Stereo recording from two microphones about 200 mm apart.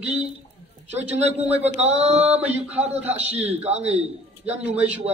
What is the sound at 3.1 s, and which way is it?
A man's voice, 30° right (ahead or behind).